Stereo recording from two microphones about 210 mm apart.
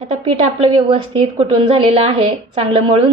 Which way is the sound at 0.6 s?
25° right (ahead or behind).